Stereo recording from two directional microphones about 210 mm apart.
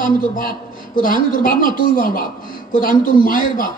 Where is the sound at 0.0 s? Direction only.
40° left (ahead or behind).